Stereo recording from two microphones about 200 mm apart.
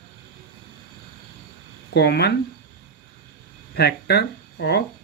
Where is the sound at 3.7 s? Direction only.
55° left (ahead or behind).